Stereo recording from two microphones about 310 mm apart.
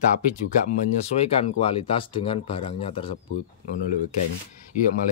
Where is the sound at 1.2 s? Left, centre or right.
Centre.